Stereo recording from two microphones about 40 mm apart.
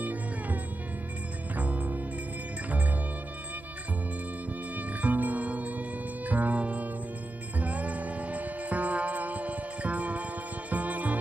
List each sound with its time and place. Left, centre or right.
0.0 s music: right
1.6 s music: right
4.7 s music: right